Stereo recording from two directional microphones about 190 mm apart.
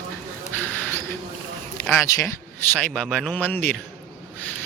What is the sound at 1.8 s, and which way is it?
A man's voice, 10° left (ahead or behind).